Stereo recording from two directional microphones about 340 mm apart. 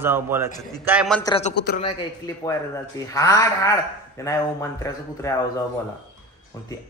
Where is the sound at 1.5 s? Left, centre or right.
Left.